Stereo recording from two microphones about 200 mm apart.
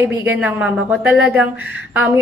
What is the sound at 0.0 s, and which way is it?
A woman's voice, 10° right (ahead or behind).